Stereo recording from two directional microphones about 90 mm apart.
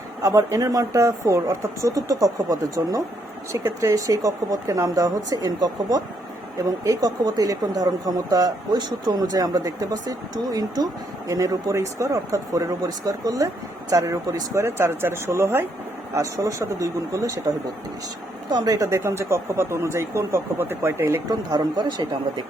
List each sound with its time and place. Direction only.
0.2 s speech: 40° right (ahead or behind)
18.5 s speech: 45° right (ahead or behind); by 21.2 s 30° right (ahead or behind)
21.2 s speech: 45° right (ahead or behind)
21.8 s speech: 60° right (ahead or behind)